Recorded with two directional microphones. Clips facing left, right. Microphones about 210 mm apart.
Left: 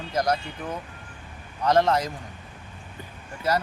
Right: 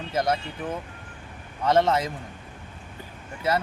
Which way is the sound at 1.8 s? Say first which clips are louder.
Even; centre (ahead or behind).